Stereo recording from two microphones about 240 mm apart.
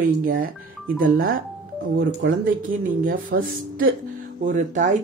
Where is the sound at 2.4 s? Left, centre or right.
Right.